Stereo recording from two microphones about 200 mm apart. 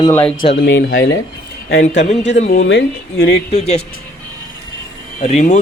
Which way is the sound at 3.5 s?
35° left (ahead or behind).